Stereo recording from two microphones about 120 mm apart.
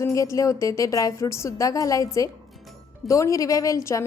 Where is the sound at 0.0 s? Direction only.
25° left (ahead or behind).